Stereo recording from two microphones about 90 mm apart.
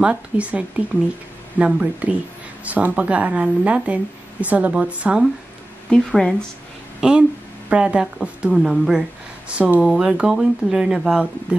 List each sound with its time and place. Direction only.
0.0 s speech: 15° right (ahead or behind)
5.9 s speech: 10° left (ahead or behind)
7.0 s speech: 10° right (ahead or behind)